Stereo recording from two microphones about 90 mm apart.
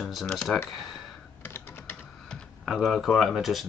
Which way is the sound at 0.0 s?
Centre (ahead or behind).